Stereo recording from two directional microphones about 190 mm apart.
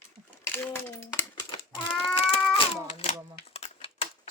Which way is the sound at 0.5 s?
10° left (ahead or behind).